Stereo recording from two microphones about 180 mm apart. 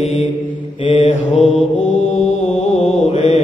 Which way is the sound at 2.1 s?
40° left (ahead or behind).